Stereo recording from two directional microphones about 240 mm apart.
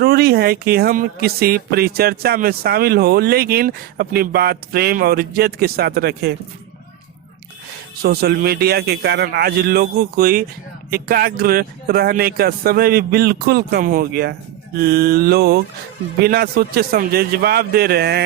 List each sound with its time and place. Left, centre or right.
0.0 s speech: right
8.0 s speech: right